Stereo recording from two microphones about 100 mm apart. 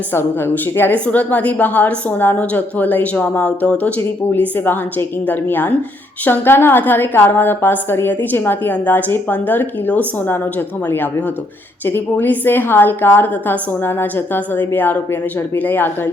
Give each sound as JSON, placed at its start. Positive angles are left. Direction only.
{"t": 0.1, "sound": "a woman's voice", "side_deg": 20}